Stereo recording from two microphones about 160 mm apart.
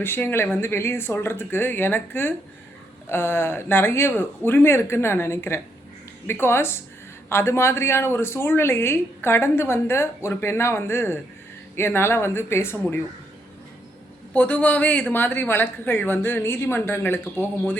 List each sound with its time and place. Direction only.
0.0 s speech: 15° left (ahead or behind)
14.3 s speech: 10° left (ahead or behind)